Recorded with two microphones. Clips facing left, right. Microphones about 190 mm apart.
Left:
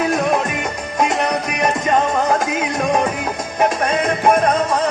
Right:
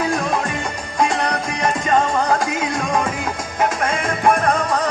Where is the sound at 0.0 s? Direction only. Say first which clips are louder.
Left 3 dB; 20° left (ahead or behind).